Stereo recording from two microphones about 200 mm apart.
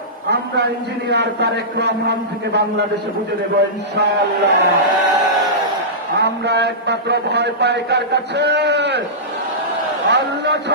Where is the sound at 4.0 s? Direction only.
55° right (ahead or behind).